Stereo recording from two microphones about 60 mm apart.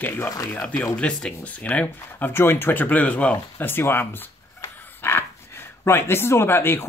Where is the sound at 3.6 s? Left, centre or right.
Left.